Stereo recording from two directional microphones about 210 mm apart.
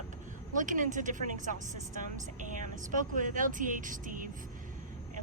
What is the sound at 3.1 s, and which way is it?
Speech, 40° right (ahead or behind).